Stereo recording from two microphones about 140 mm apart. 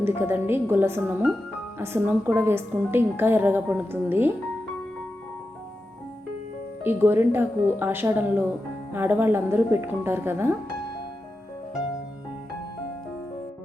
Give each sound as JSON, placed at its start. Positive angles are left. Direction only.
{"t": 0.0, "sound": "a woman's voice", "side_deg": -15}
{"t": 6.8, "sound": "a woman's voice", "side_deg": -15}